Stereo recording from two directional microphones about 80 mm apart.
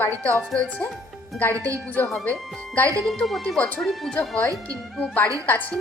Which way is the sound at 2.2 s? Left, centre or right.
Left.